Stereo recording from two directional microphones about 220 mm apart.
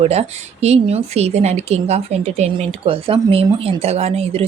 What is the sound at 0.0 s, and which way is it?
Speech, 30° right (ahead or behind).